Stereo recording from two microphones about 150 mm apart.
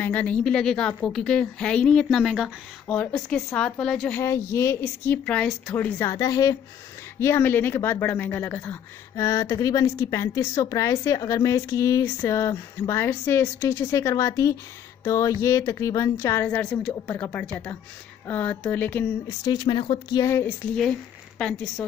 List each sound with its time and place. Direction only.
0.0 s speech: 10° left (ahead or behind)
4.2 s a woman's voice: 20° left (ahead or behind)
9.1 s a woman's voice: 20° left (ahead or behind)
16.4 s speech: 5° left (ahead or behind)
19.4 s speech: 30° left (ahead or behind)
20.2 s a woman's voice: 20° left (ahead or behind)
21.4 s speech: 5° left (ahead or behind)